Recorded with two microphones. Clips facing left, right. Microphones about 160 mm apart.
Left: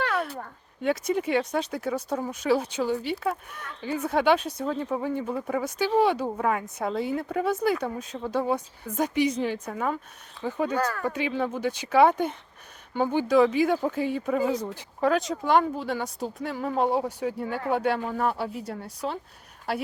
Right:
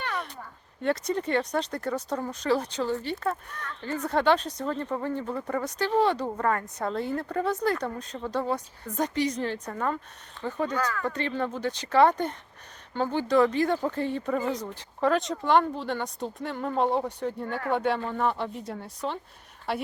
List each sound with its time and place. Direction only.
0.0 s a sound: 75° left (ahead or behind)
0.8 s speech: 5° left (ahead or behind)
10.8 s speech: 45° left (ahead or behind)
11.0 s speech: 10° left (ahead or behind)